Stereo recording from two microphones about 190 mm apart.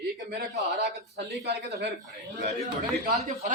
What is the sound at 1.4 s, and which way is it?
Speech, 60° right (ahead or behind).